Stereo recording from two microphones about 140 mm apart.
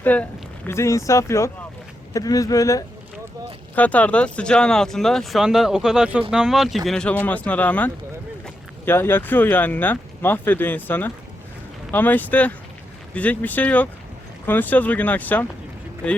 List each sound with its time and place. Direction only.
0.0 s speech: 10° left (ahead or behind)
3.8 s speech: 10° left (ahead or behind)